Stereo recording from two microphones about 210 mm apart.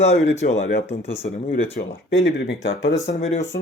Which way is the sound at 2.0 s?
55° left (ahead or behind).